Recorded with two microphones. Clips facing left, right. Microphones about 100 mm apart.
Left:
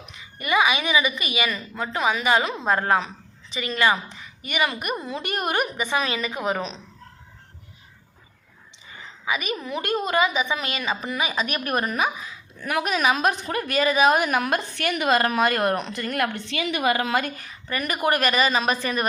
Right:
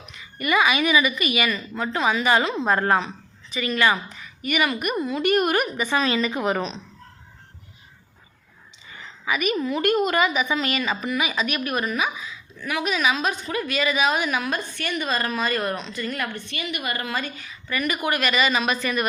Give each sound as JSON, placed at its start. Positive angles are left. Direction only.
{"t": 0.2, "sound": "a woman's voice", "side_deg": 25}
{"t": 3.5, "sound": "a woman's voice", "side_deg": 25}
{"t": 8.9, "sound": "a sound", "side_deg": 20}
{"t": 9.6, "sound": "a woman's voice", "side_deg": 20}
{"t": 11.1, "sound": "a woman's voice", "side_deg": 30}